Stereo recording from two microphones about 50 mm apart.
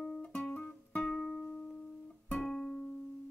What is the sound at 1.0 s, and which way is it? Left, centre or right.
Music, centre.